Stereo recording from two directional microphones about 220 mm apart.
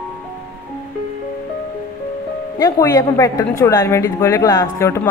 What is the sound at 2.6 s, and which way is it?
A woman's voice, 15° left (ahead or behind).